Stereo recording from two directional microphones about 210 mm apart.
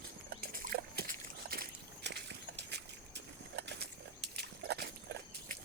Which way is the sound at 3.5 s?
55° right (ahead or behind).